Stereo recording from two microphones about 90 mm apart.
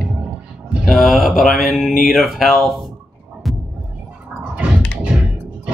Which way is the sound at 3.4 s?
Centre (ahead or behind).